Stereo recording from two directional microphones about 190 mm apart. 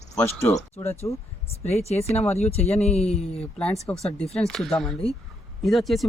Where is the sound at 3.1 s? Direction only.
5° left (ahead or behind).